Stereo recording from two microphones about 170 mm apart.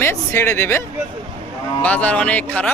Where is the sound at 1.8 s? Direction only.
10° left (ahead or behind).